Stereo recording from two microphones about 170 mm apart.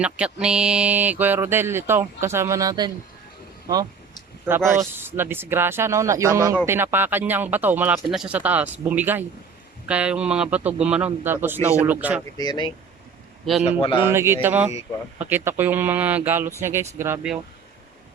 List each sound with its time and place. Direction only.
0.0 s speech: 5° right (ahead or behind); by 2.9 s 25° right (ahead or behind)
4.7 s speech: 15° right (ahead or behind)
12.4 s speech: 25° left (ahead or behind)
13.4 s a man's voice: centre (ahead or behind)
13.7 s speech: 30° left (ahead or behind)
14.0 s speech: 15° right (ahead or behind)